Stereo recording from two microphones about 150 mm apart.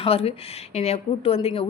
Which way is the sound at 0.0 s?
40° left (ahead or behind).